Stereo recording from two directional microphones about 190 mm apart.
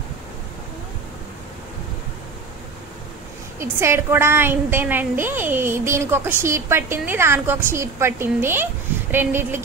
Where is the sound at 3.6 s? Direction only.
15° right (ahead or behind).